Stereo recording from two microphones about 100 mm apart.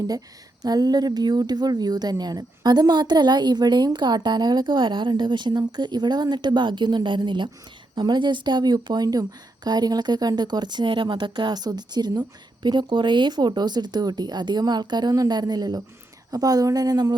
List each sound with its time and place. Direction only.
0.6 s a woman's voice: 40° right (ahead or behind)